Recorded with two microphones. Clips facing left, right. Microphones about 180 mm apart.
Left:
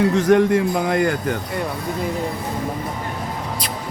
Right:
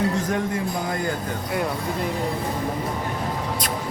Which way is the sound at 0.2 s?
75° left (ahead or behind).